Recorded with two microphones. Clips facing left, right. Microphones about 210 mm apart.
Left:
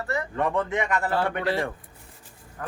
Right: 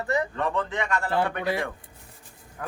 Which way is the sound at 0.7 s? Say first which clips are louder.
Left 3 dB; 20° left (ahead or behind).